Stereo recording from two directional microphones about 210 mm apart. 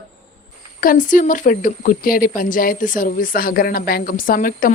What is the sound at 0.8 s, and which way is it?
Speech, 40° left (ahead or behind).